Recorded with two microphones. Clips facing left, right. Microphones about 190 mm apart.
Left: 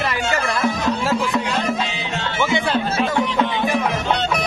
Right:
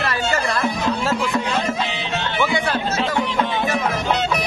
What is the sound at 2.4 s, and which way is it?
Speech, 25° left (ahead or behind).